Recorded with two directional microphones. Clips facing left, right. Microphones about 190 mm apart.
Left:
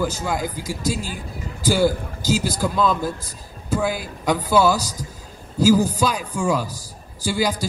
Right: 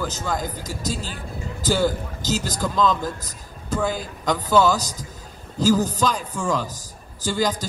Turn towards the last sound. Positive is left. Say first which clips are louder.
# left 1 dB
turn(degrees=10)  # may be behind; listen again after turning